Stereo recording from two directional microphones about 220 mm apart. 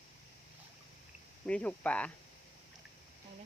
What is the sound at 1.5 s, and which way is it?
Speech, 5° left (ahead or behind).